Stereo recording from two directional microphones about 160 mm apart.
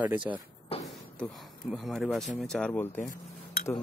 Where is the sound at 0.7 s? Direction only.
35° left (ahead or behind).